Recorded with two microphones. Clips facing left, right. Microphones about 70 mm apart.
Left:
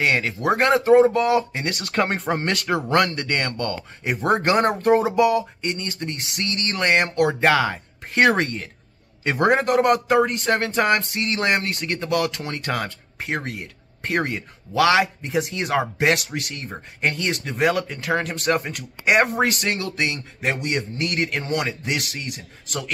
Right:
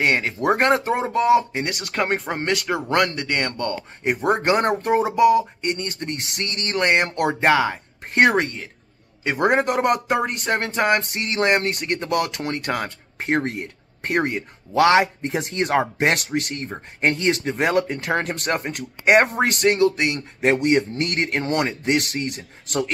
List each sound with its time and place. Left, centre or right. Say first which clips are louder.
0.0 s speech: right 1 dB; right
4.2 s speech: left 1 dB; centre
13.2 s speech: right 5 dB; right
14.1 s speech: right 2 dB; right
14.7 s speech: right 2 dB; right
21.2 s speech: right 3 dB; right